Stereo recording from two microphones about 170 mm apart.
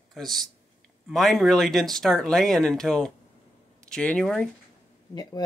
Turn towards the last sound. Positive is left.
turn(degrees=20)  # may be behind; listen again after turning